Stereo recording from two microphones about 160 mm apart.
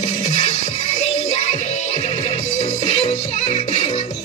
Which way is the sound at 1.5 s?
50° left (ahead or behind).